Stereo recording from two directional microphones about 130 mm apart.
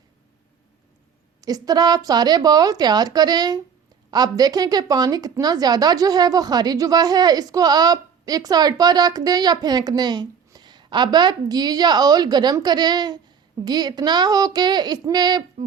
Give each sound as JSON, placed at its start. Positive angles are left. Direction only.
{"t": 1.4, "sound": "a woman's voice", "side_deg": -30}